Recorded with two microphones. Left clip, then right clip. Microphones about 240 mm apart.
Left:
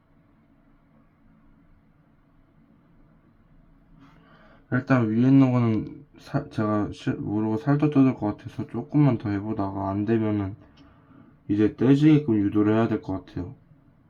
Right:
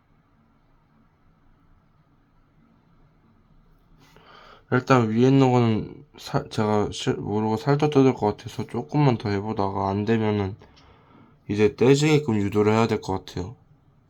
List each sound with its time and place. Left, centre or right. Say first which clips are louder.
4.3 s speech: right 5 dB; centre
11.5 s speech: right 3 dB; right